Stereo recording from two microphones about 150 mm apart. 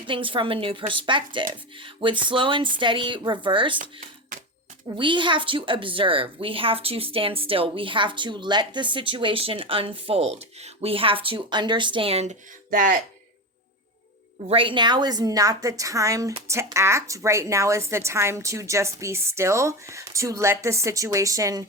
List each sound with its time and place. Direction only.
0.1 s a woman's voice: 35° right (ahead or behind)
4.9 s a woman's voice: 35° right (ahead or behind); by 13.0 s 65° right (ahead or behind)
14.5 s speech: 35° right (ahead or behind)